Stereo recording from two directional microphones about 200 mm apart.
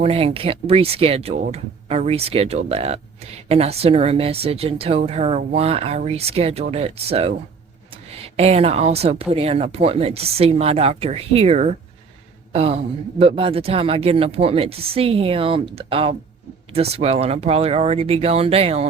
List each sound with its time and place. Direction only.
0.0 s speech: 30° right (ahead or behind)
8.4 s speech: 30° right (ahead or behind)